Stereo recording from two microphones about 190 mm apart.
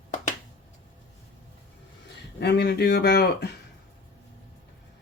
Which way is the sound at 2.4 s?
60° left (ahead or behind).